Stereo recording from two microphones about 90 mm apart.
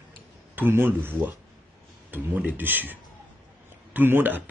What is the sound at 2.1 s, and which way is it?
A man's voice, 20° right (ahead or behind).